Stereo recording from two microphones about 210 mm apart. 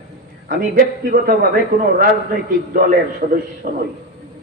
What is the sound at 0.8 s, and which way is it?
Speech, 45° right (ahead or behind).